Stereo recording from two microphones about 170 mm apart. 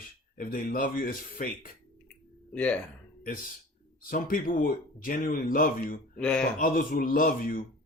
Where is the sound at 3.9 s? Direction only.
55° left (ahead or behind).